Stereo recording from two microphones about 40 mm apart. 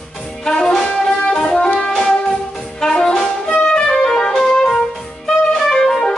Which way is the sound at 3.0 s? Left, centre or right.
Centre.